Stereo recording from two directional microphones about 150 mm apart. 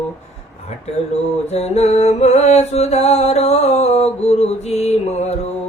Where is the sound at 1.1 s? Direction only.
45° left (ahead or behind).